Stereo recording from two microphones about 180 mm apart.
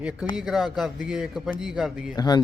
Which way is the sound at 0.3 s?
Centre (ahead or behind).